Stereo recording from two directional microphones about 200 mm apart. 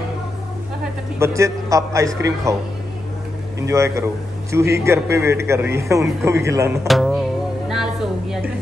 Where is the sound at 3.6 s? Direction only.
15° right (ahead or behind).